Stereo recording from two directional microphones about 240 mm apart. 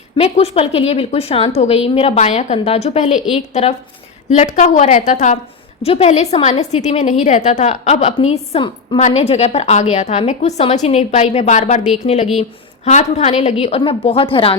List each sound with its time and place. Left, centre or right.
0.2 s a woman's voice: left